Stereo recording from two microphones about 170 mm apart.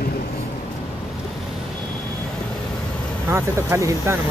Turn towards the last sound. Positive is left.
turn(degrees=-15)  # may be behind; listen again after turning